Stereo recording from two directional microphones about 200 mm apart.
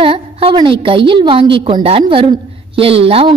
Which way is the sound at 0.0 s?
30° right (ahead or behind).